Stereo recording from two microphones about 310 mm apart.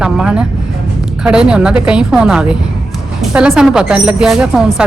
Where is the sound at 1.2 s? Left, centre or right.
Centre.